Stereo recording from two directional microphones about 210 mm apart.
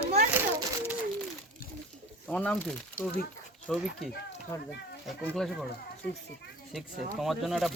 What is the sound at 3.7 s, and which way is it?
Speech, centre (ahead or behind).